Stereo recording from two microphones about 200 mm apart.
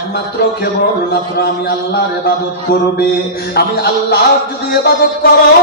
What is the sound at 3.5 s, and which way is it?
A man's voice, 50° left (ahead or behind).